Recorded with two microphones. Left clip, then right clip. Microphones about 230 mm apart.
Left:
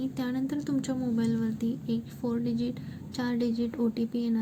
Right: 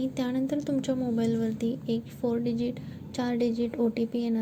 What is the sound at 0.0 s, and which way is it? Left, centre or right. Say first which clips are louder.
A woman's voice: right 2 dB; centre.